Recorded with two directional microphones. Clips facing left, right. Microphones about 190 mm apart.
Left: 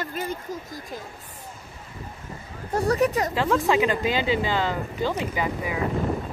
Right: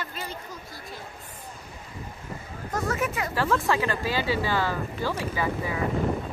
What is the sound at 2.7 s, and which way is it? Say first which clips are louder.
Speech: left 7 dB; 35° left (ahead or behind).